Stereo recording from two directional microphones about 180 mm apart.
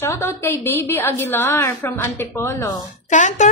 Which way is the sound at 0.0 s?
15° left (ahead or behind).